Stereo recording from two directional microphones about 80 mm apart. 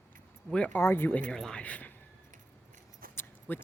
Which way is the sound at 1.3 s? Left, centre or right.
Centre.